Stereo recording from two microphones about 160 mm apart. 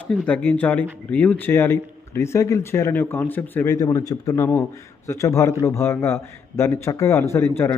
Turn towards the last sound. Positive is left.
turn(degrees=15)  # may be behind; listen again after turning